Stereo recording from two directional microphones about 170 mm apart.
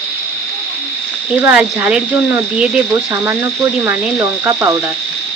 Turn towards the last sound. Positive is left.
turn(degrees=-15)  # may be behind; listen again after turning